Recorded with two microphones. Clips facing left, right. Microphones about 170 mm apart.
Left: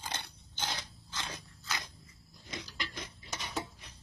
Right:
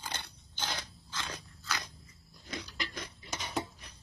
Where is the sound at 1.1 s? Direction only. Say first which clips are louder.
Right 1 dB; 20° left (ahead or behind).